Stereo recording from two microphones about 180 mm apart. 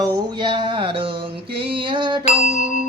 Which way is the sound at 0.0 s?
20° right (ahead or behind).